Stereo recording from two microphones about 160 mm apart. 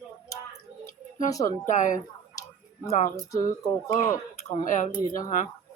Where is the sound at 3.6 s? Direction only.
20° left (ahead or behind).